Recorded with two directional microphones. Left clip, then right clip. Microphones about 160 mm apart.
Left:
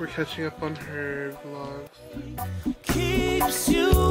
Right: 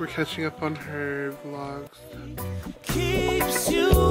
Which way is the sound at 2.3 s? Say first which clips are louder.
Left 6 dB; centre (ahead or behind).